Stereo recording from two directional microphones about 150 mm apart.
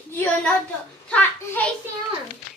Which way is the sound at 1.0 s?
10° left (ahead or behind).